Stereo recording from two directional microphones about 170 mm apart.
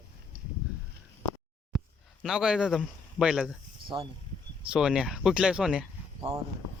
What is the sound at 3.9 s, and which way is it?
Speech, 30° right (ahead or behind).